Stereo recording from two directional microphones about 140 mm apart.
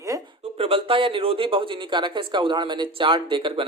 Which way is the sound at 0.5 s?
40° right (ahead or behind).